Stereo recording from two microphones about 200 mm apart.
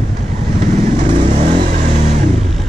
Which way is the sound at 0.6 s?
40° right (ahead or behind).